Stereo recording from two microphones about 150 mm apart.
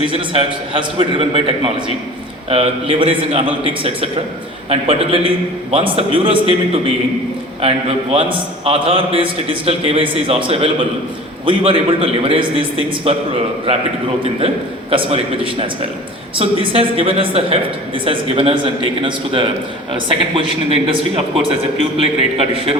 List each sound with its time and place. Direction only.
0.0 s a man's voice: 35° right (ahead or behind)
7.6 s a man's voice: 40° right (ahead or behind)
14.4 s a man's voice: 40° right (ahead or behind)